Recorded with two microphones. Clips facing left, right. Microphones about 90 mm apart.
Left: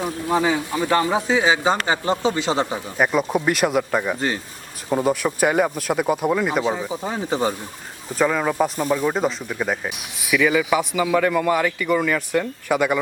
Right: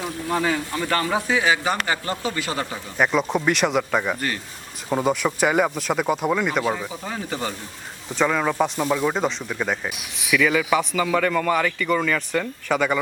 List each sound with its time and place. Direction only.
0.0 s speech: 15° left (ahead or behind)
3.0 s speech: 5° left (ahead or behind)
6.6 s speech: 15° left (ahead or behind)
8.1 s speech: 5° left (ahead or behind)